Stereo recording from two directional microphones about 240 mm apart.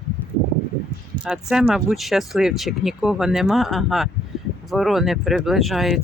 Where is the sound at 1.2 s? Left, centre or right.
Centre.